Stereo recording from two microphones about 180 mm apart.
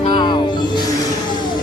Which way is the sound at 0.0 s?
30° left (ahead or behind).